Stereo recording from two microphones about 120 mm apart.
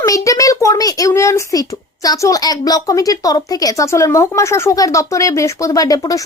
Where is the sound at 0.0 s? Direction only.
30° left (ahead or behind).